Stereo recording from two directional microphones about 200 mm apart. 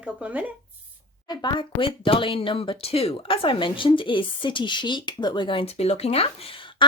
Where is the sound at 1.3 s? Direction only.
20° left (ahead or behind).